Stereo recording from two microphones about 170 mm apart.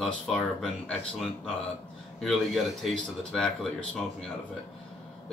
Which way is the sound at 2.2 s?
Centre (ahead or behind).